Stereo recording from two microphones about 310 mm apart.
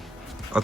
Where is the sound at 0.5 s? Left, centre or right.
Centre.